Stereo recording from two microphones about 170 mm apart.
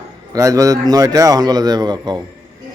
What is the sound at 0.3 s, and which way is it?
A man's voice, 20° right (ahead or behind).